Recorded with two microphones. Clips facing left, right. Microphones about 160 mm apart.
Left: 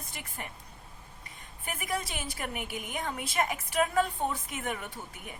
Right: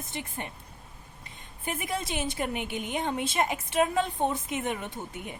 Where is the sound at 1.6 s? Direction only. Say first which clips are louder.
Right 2 dB; 25° right (ahead or behind).